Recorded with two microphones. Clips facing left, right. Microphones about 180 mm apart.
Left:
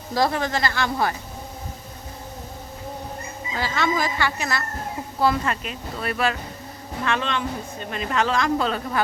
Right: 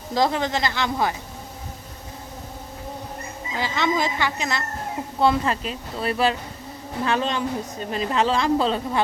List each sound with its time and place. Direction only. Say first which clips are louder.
0.1 s speech: right 1 dB; 20° right (ahead or behind)
3.5 s speech: even; 20° right (ahead or behind)